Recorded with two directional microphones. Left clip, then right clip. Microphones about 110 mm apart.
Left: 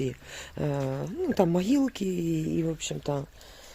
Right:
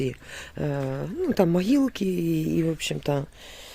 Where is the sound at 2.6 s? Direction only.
60° right (ahead or behind).